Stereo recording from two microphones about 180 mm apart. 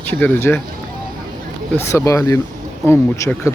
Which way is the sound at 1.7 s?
15° left (ahead or behind).